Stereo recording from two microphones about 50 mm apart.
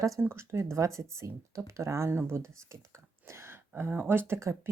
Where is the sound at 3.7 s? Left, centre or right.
Right.